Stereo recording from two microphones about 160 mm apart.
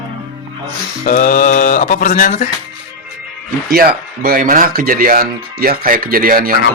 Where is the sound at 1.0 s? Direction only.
55° left (ahead or behind).